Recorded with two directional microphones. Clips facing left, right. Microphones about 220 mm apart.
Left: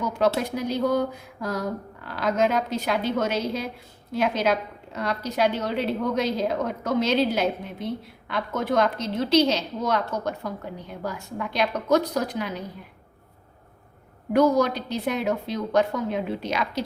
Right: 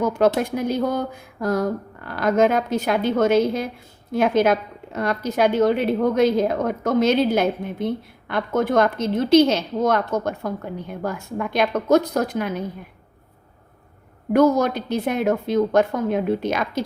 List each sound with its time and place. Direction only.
0.3 s a woman's voice: 50° right (ahead or behind)
14.3 s a woman's voice: 50° right (ahead or behind)